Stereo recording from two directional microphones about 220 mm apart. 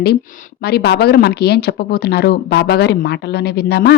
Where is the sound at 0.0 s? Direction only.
40° left (ahead or behind).